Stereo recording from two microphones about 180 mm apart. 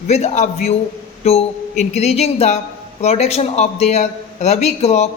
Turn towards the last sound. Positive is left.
turn(degrees=35)  # may be behind; listen again after turning